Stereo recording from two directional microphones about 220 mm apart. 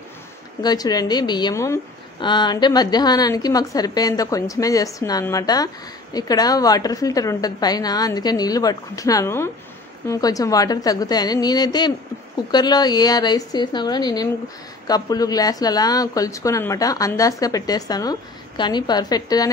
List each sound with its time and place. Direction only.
0.6 s a woman's voice: 15° left (ahead or behind)